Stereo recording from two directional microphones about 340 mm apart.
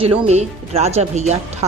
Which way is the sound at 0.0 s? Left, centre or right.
Centre.